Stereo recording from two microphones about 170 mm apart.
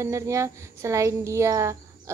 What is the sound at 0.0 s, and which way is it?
A woman's voice, 15° right (ahead or behind).